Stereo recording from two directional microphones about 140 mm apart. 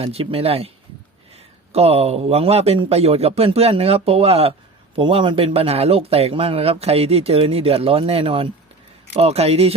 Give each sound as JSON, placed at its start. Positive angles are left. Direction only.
{"t": 0.0, "sound": "a man's voice", "side_deg": -45}